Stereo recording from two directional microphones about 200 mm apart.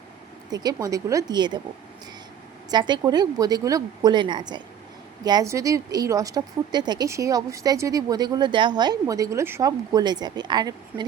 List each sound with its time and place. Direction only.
0.5 s a woman's voice: 20° right (ahead or behind)
2.6 s a woman's voice: 20° right (ahead or behind)